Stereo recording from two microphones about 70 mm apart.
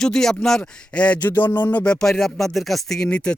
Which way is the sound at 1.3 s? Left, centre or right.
Left.